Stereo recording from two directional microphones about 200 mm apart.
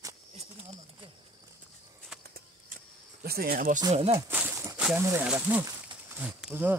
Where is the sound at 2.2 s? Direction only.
50° right (ahead or behind).